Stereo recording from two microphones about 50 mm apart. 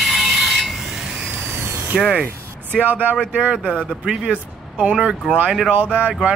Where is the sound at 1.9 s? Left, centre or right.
Centre.